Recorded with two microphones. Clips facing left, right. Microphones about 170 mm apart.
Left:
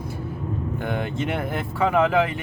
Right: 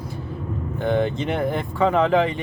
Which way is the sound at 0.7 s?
5° left (ahead or behind).